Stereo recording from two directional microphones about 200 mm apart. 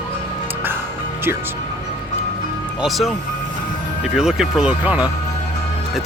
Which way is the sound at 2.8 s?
Centre (ahead or behind).